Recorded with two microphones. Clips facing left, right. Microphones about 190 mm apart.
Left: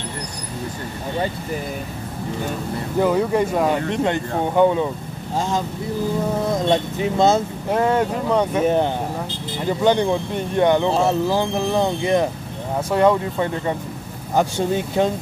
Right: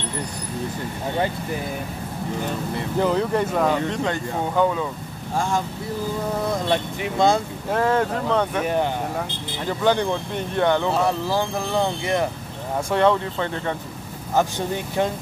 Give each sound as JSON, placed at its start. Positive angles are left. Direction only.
{"t": 3.0, "sound": "speech", "side_deg": 10}
{"t": 3.9, "sound": "speech", "side_deg": 20}
{"t": 6.7, "sound": "speech", "side_deg": 20}
{"t": 8.5, "sound": "speech", "side_deg": 25}
{"t": 9.7, "sound": "speech", "side_deg": 15}
{"t": 12.9, "sound": "speech", "side_deg": 10}